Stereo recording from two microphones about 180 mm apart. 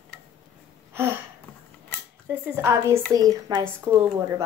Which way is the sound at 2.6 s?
15° right (ahead or behind).